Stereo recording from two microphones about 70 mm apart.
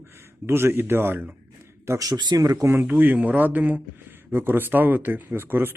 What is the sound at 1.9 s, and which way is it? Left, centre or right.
Speech, right.